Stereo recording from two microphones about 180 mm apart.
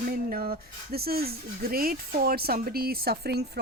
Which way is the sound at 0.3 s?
55° right (ahead or behind).